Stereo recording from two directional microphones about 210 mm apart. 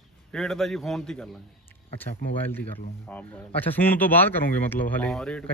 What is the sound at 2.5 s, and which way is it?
Speech, 10° left (ahead or behind).